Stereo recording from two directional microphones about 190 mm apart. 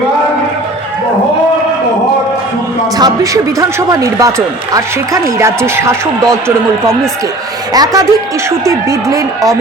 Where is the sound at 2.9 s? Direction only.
20° right (ahead or behind).